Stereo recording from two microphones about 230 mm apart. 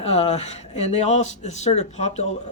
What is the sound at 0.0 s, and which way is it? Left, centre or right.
Speech, left.